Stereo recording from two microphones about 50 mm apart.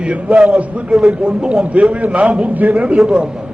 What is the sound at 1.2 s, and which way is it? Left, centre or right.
A man's voice, right.